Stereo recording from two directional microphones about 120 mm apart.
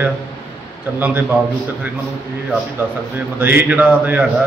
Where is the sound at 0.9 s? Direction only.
15° right (ahead or behind).